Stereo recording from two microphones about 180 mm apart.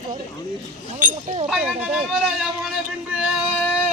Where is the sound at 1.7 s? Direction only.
5° right (ahead or behind).